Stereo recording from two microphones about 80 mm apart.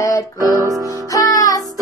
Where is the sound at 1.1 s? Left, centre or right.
Left.